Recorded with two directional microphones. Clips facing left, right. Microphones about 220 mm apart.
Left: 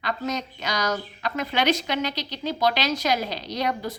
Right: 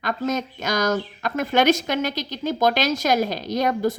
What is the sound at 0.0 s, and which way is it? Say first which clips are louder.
A woman's voice: right 4 dB; 50° right (ahead or behind).